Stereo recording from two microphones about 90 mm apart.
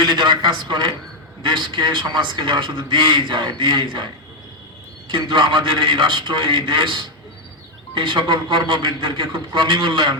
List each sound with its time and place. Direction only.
0.0 s a man's voice: 55° right (ahead or behind)